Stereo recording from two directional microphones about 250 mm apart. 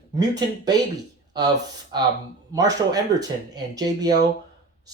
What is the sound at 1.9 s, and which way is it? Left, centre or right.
Speech, centre.